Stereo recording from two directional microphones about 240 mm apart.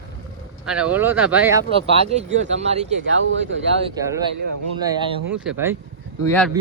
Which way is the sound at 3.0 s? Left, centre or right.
Right.